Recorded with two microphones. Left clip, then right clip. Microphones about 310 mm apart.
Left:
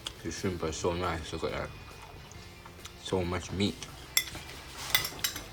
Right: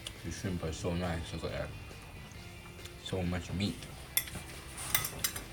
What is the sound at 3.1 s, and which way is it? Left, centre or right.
Speech, centre.